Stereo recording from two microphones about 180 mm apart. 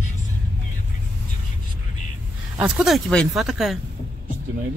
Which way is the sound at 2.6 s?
Centre (ahead or behind).